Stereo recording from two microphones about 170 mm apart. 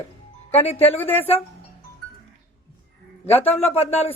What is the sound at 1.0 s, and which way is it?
Speech, 10° left (ahead or behind).